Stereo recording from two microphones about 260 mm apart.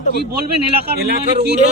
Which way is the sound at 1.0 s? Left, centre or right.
Right.